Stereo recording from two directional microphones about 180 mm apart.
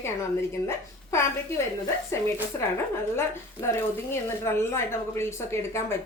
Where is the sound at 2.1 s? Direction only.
15° left (ahead or behind).